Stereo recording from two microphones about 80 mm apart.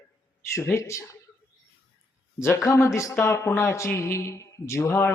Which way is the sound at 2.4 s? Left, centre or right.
Left.